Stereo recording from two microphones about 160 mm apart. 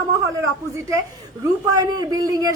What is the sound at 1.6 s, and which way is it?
Speech, 25° right (ahead or behind).